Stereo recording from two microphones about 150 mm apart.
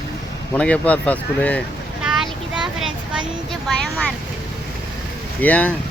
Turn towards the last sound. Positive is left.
turn(degrees=10)  # may be behind; listen again after turning